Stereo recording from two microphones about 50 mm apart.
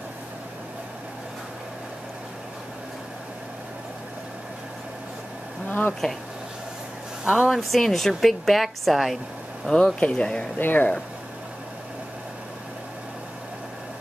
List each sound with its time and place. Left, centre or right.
5.7 s speech: left
7.2 s a woman's voice: centre
9.9 s speech: left
10.6 s speech: left